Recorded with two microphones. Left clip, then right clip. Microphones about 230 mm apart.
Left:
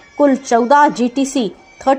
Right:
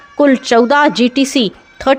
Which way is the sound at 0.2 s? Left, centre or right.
Right.